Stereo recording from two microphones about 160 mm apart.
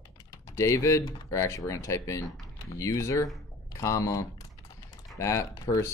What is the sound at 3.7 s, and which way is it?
Typing, 20° left (ahead or behind).